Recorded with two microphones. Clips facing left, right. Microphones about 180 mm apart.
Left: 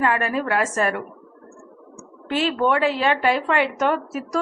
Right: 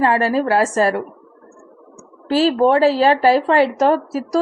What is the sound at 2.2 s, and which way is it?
A woman's voice, 35° right (ahead or behind).